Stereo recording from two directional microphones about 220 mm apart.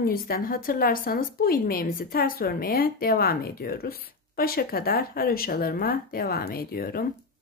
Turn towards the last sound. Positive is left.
turn(degrees=40)  # may be behind; listen again after turning